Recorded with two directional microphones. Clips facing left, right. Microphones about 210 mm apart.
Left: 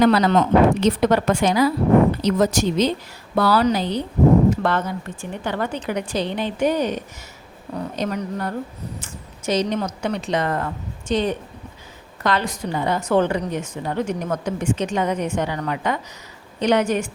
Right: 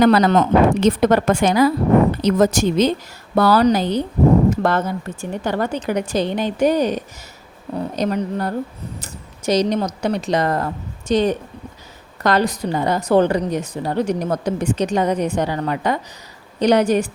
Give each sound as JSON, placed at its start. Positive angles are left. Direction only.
{"t": 0.0, "sound": "a woman's voice", "side_deg": -50}